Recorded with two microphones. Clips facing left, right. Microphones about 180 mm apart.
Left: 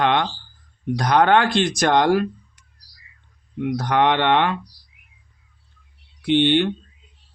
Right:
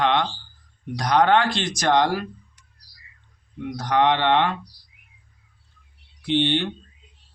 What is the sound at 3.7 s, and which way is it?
Speech, 60° left (ahead or behind).